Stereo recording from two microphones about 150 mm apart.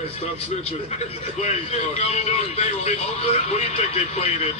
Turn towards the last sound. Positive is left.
turn(degrees=45)  # may be behind; listen again after turning